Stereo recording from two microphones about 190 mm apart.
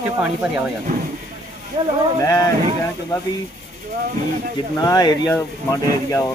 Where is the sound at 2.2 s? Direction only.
15° left (ahead or behind).